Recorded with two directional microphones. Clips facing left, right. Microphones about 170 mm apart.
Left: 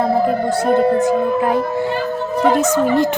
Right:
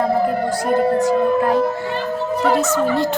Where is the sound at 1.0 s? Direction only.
20° left (ahead or behind).